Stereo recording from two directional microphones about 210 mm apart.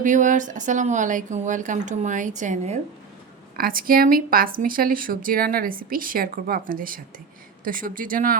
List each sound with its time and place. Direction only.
0.0 s speech: 35° right (ahead or behind)